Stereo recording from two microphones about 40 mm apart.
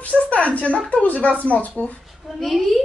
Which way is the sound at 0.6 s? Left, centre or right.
Left.